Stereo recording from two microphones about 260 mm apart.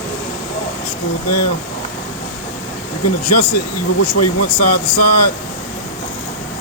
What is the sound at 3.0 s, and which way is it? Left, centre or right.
Speech, left.